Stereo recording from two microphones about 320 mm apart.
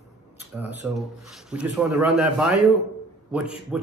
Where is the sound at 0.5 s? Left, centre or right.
Centre.